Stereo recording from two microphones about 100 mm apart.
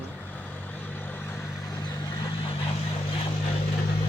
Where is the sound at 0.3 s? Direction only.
15° left (ahead or behind).